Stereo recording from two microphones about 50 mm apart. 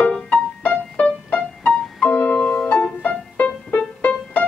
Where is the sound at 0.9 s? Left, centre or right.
Left.